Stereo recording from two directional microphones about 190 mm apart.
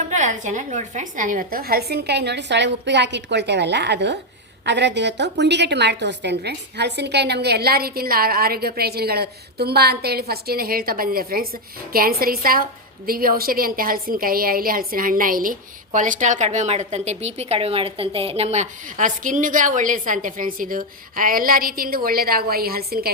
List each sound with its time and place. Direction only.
0.1 s a woman's voice: 40° right (ahead or behind)